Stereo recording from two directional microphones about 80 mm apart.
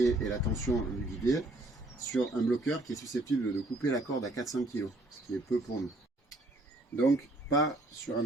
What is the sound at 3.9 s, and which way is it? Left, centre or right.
Speech, left.